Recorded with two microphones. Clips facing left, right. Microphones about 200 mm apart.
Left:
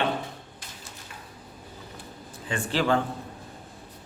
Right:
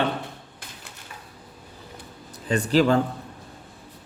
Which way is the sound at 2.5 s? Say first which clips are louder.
Right 6 dB; 40° right (ahead or behind).